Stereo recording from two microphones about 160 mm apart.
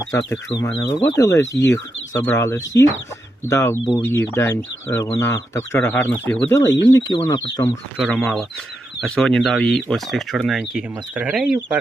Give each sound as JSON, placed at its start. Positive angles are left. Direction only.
{"t": 0.8, "sound": "speech", "side_deg": 25}
{"t": 7.9, "sound": "speech", "side_deg": 5}